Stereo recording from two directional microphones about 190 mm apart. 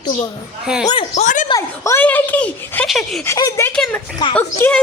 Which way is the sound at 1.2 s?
40° left (ahead or behind).